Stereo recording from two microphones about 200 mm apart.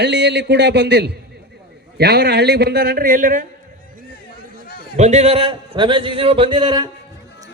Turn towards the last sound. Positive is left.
turn(degrees=-25)  # may be behind; listen again after turning